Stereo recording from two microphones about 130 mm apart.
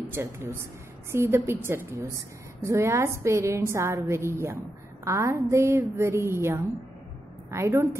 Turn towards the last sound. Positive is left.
turn(degrees=-20)  # may be behind; listen again after turning